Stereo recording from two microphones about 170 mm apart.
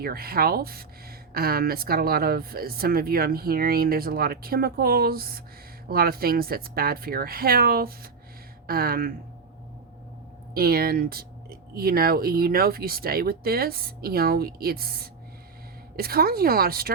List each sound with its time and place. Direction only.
0.0 s speech: 65° right (ahead or behind)
10.5 s speech: 60° right (ahead or behind)